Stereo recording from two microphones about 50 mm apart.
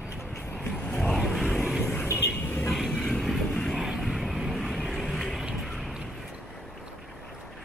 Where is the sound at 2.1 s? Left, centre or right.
Left.